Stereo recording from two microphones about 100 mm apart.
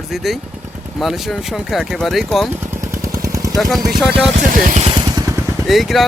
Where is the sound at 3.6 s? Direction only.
Centre (ahead or behind).